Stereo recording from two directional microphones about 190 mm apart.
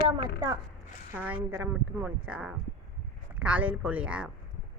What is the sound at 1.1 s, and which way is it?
A woman's voice, 10° right (ahead or behind).